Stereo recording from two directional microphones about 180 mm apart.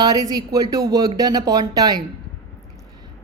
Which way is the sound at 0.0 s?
20° right (ahead or behind).